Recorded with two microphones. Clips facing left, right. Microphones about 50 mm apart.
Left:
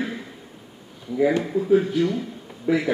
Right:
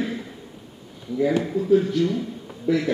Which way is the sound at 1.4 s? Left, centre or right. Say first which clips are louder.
Even; centre.